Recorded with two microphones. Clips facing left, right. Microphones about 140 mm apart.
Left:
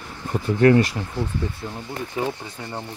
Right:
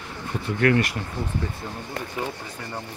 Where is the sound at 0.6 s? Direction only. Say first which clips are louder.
Left 5 dB; 30° left (ahead or behind).